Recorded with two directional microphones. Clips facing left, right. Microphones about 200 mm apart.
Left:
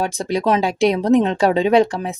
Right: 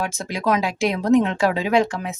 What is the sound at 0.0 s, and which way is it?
Speech, 35° left (ahead or behind).